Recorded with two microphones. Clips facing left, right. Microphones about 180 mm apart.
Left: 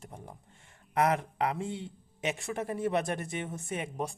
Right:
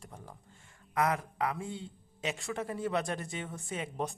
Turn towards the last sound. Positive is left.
turn(degrees=20)  # may be behind; listen again after turning